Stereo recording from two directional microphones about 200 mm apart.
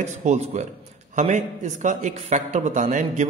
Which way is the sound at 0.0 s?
35° right (ahead or behind).